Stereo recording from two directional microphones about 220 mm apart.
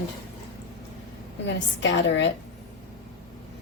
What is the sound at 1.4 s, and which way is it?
Speech, 55° left (ahead or behind).